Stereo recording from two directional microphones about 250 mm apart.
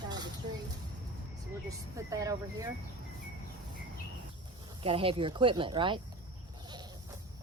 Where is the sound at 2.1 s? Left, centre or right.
Centre.